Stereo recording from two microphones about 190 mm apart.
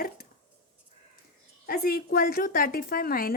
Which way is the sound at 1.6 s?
55° left (ahead or behind).